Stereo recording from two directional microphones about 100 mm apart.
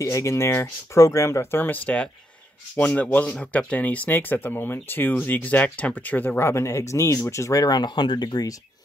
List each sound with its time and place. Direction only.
0.0 s speech: 30° left (ahead or behind)